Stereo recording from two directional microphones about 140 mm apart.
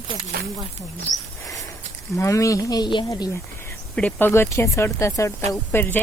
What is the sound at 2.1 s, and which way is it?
Speech, 20° left (ahead or behind).